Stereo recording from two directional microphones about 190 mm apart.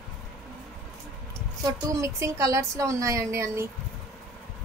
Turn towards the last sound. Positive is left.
turn(degrees=-15)  # may be behind; listen again after turning